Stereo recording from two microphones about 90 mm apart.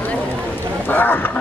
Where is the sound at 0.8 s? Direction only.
20° left (ahead or behind).